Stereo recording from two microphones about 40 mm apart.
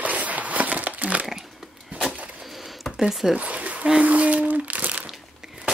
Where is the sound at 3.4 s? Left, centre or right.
Right.